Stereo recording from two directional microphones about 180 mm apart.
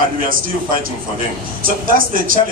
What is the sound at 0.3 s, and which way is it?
A man's voice, 50° right (ahead or behind).